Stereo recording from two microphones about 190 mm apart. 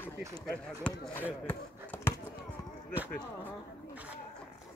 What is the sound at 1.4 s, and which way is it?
Basketball bounce, 10° left (ahead or behind).